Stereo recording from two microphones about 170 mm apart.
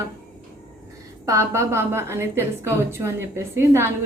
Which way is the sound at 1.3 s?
15° right (ahead or behind).